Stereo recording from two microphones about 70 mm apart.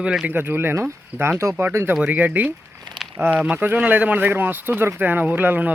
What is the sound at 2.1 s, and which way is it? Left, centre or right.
Speech, right.